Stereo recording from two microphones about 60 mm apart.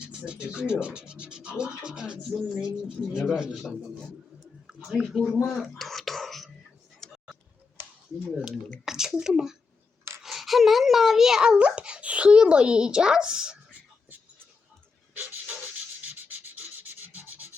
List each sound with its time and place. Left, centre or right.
0.0 s a child's voice: centre
4.6 s a sound: centre
5.3 s whispering: centre
7.0 s tick-tock: centre
8.8 s a child's voice: centre
16.0 s rub: right